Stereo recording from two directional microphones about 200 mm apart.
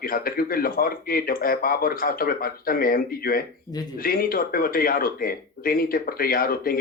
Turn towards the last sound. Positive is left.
turn(degrees=45)  # may be behind; listen again after turning